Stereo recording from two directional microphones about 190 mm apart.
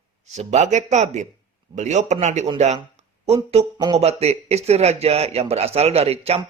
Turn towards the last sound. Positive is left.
turn(degrees=-30)  # may be behind; listen again after turning